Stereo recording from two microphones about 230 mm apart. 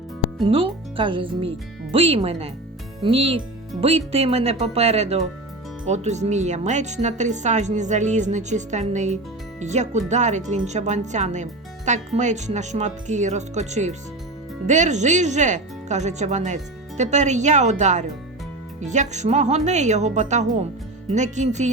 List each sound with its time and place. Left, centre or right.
0.4 s speech: right